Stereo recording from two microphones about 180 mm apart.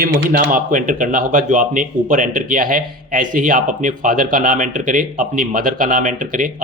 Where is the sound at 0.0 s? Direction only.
50° right (ahead or behind).